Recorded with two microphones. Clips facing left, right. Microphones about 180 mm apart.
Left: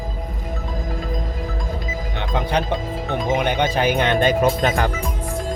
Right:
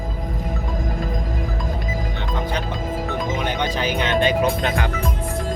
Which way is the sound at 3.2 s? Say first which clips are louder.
Left 7 dB; 55° left (ahead or behind).